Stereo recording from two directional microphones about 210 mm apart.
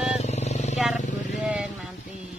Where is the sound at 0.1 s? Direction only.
30° left (ahead or behind).